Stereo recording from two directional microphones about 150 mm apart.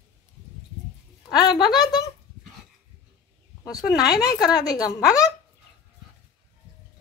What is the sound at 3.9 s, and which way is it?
A woman's voice, 25° left (ahead or behind).